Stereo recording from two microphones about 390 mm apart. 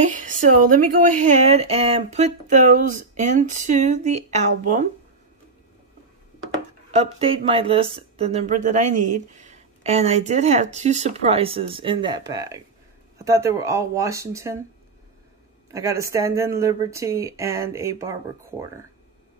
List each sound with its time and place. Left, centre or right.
0.0 s a woman's voice: centre
6.9 s speech: centre
15.7 s speech: centre